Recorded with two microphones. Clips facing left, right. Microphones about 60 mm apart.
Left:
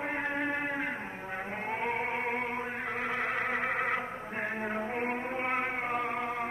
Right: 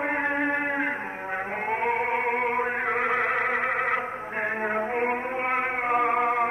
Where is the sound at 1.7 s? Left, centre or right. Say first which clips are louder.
Right 7 dB; right.